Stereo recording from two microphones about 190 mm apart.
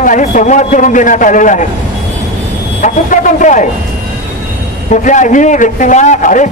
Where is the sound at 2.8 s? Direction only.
40° left (ahead or behind).